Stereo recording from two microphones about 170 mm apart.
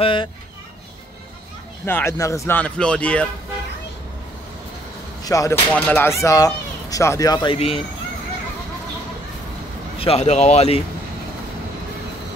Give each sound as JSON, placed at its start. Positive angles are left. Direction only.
{"t": 0.0, "sound": "speech", "side_deg": 30}
{"t": 1.9, "sound": "speech", "side_deg": 15}
{"t": 5.2, "sound": "speech", "side_deg": 20}
{"t": 5.7, "sound": "speech", "side_deg": 10}
{"t": 7.5, "sound": "speech", "side_deg": 35}
{"t": 9.9, "sound": "speech", "side_deg": 35}